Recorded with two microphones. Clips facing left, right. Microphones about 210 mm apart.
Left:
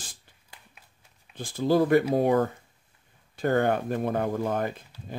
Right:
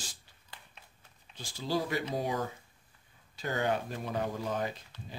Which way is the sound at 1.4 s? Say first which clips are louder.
Left 11 dB; 55° left (ahead or behind).